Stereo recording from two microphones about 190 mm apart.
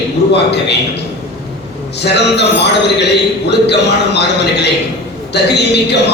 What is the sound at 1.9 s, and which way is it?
A man's voice, 65° left (ahead or behind).